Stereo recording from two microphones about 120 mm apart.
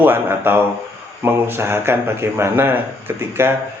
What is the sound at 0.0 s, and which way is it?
Speech, 20° right (ahead or behind).